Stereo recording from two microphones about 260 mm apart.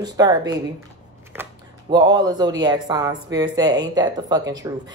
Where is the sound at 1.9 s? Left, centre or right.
Centre.